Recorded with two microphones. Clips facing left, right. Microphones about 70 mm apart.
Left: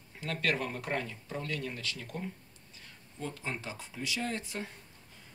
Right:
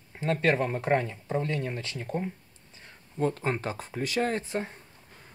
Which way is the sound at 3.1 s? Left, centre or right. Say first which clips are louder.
Right 11 dB; right.